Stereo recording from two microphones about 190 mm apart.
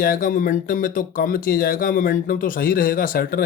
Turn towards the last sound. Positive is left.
turn(degrees=50)  # may be behind; listen again after turning